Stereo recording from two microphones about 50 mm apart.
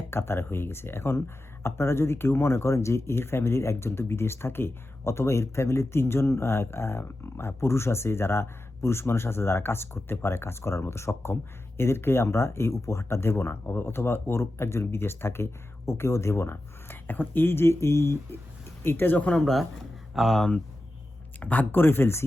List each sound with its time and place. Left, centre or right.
0.1 s speech: left
15.9 s speech: left
17.1 s speech: left
18.8 s speech: left
19.3 s speech: centre
21.4 s speech: left
21.8 s speech: left